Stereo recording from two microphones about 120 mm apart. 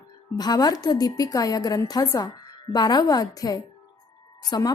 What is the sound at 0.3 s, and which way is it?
Speech, 35° left (ahead or behind).